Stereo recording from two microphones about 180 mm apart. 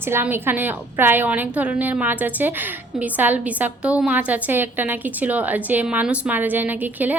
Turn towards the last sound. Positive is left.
turn(degrees=-10)  # may be behind; listen again after turning